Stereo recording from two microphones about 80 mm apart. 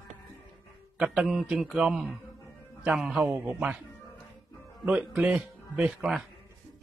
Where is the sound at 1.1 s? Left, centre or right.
Centre.